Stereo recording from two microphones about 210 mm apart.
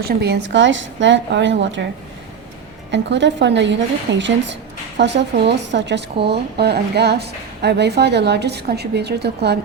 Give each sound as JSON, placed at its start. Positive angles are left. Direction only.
{"t": 0.0, "sound": "a woman's voice", "side_deg": -50}
{"t": 2.9, "sound": "a woman's voice", "side_deg": -60}